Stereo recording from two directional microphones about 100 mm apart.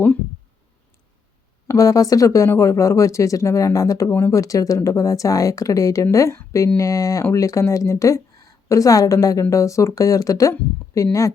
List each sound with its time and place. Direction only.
1.6 s a woman's voice: 30° left (ahead or behind)